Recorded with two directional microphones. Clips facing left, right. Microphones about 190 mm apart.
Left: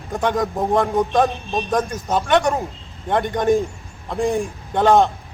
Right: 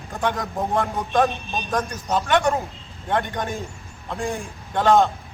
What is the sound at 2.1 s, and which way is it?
A man's voice, 15° left (ahead or behind).